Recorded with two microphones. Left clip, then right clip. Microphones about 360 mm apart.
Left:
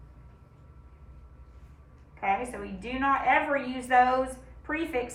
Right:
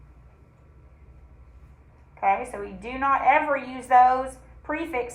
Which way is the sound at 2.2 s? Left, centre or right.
Centre.